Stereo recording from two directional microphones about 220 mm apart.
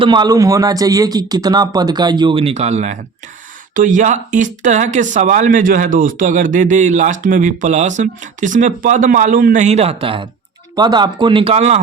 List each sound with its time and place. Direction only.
0.0 s speech: 20° right (ahead or behind)